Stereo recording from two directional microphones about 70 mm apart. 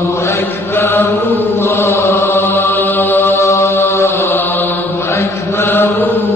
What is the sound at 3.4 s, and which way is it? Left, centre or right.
Mantra, left.